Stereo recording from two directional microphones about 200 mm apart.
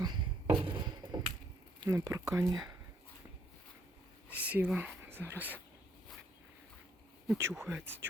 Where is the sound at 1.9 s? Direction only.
15° right (ahead or behind).